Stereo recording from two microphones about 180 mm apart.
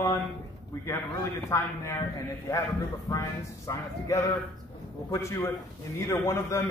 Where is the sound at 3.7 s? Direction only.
20° left (ahead or behind).